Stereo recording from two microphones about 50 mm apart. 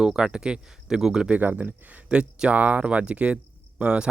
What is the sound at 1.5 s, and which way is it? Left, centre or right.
Speech, right.